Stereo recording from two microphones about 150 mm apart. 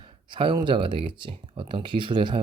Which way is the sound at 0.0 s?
35° right (ahead or behind).